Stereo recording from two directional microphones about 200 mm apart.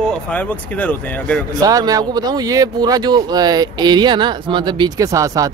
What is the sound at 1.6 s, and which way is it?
Speech, 20° right (ahead or behind).